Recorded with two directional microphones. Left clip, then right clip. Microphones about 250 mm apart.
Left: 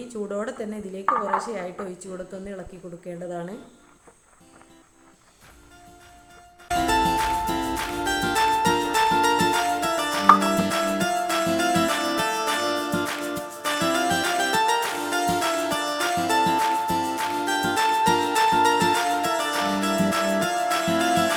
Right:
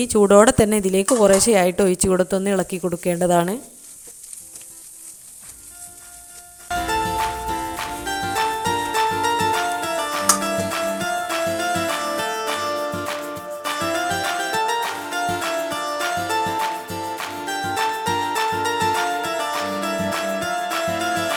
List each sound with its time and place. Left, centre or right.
0.0 s speech: right
6.7 s music: centre